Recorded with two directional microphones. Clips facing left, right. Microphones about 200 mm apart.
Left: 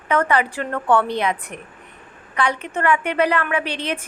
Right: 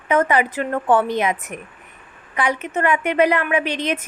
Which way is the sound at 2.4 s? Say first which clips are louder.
Right 1 dB; 15° right (ahead or behind).